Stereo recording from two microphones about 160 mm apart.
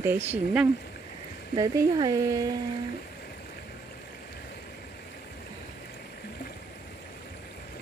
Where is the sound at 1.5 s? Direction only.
20° right (ahead or behind).